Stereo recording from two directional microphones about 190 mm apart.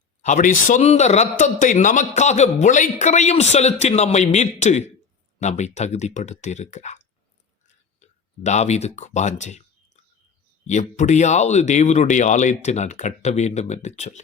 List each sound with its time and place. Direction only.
0.2 s a man's voice: 40° left (ahead or behind)
8.4 s a man's voice: 35° left (ahead or behind)